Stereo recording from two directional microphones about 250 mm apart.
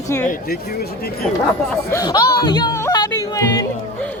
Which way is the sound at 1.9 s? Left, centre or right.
Centre.